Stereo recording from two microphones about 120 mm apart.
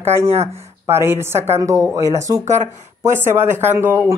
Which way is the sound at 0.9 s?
20° right (ahead or behind).